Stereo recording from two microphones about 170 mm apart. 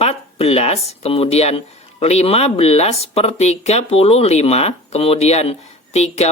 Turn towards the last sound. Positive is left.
turn(degrees=40)  # may be behind; listen again after turning